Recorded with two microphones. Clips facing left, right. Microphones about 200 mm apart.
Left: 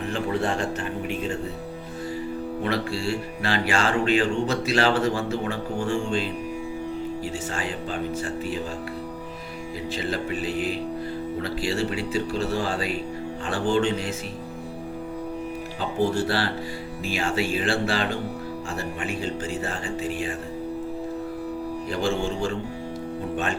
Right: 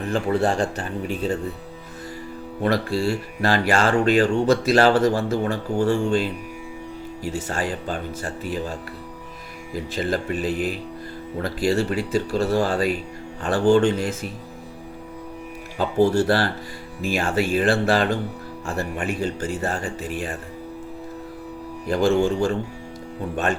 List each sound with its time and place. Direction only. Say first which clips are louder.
0.1 s speech: right 5 dB; 35° right (ahead or behind)
2.6 s speech: right 6 dB; 40° right (ahead or behind)
7.5 s speech: right 3 dB; 45° right (ahead or behind)
9.7 s speech: right 4 dB; 45° right (ahead or behind)
15.8 s speech: right 6 dB; 45° right (ahead or behind)
21.8 s speech: right 8 dB; 40° right (ahead or behind)